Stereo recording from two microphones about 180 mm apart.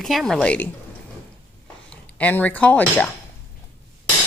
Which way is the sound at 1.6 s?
10° left (ahead or behind).